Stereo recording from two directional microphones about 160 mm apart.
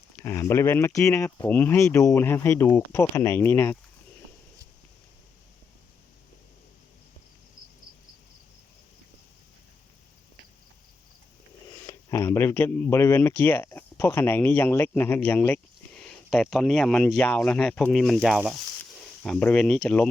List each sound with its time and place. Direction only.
0.2 s speech: 15° left (ahead or behind)
12.1 s speech: 15° left (ahead or behind)